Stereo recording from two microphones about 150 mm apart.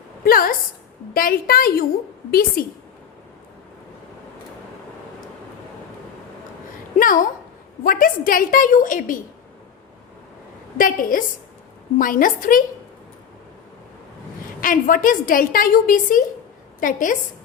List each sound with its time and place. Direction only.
0.3 s a woman's voice: 75° left (ahead or behind)
7.0 s a sound: 65° left (ahead or behind)
7.9 s a woman's voice: 70° left (ahead or behind)
10.8 s a woman's voice: 65° left (ahead or behind)
14.6 s a woman's voice: 65° left (ahead or behind)